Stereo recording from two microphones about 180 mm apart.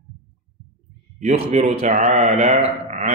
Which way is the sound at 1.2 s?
35° right (ahead or behind).